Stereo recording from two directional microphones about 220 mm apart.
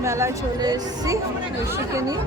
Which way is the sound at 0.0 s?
15° right (ahead or behind).